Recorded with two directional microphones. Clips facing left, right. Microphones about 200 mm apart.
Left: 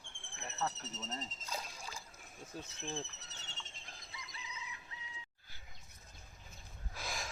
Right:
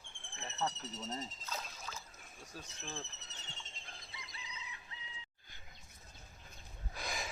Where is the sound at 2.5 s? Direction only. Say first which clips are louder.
Left 4 dB; 25° left (ahead or behind).